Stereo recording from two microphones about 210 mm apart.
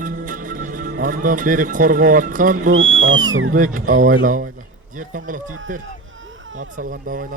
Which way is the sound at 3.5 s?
40° right (ahead or behind).